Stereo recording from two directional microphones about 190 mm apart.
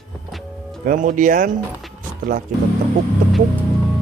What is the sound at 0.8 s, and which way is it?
Speech, 45° right (ahead or behind).